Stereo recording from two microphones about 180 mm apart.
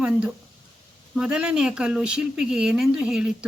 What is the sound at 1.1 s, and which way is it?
A woman's voice, 5° right (ahead or behind).